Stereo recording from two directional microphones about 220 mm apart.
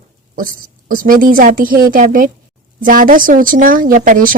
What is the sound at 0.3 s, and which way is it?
Speech, 40° right (ahead or behind).